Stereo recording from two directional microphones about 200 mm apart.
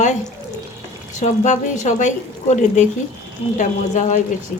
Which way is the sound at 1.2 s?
35° left (ahead or behind).